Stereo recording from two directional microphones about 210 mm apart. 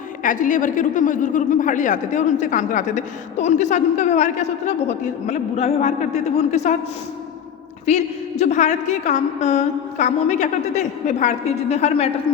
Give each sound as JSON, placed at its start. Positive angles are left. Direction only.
{"t": 0.2, "sound": "a woman's voice", "side_deg": 40}
{"t": 7.9, "sound": "a woman's voice", "side_deg": 30}